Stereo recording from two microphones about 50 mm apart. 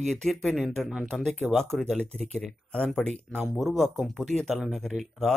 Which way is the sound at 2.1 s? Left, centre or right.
Centre.